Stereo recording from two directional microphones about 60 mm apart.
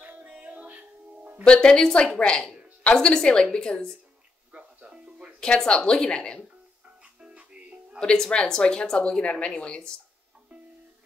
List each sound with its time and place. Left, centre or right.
0.0 s music: right
1.4 s a woman's voice: centre
4.5 s music: centre
5.4 s a woman's voice: centre
7.3 s music: centre
8.0 s a woman's voice: centre